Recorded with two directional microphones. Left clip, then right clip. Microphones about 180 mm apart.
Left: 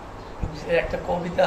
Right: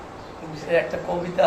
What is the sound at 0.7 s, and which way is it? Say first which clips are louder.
Speech: right 1 dB; 15° left (ahead or behind).